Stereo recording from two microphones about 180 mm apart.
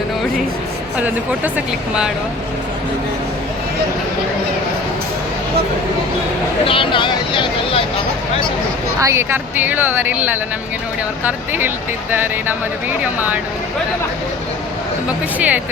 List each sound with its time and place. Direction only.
0.9 s a woman's voice: 5° right (ahead or behind)
6.7 s speech: 30° left (ahead or behind)
9.0 s a woman's voice: 15° right (ahead or behind)
15.4 s a woman's voice: 10° right (ahead or behind)